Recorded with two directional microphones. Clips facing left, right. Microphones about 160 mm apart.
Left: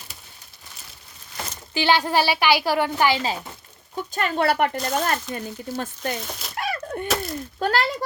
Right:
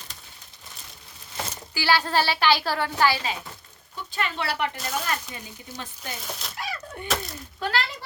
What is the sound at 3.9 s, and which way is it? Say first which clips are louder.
Speech: left 5 dB; 45° left (ahead or behind).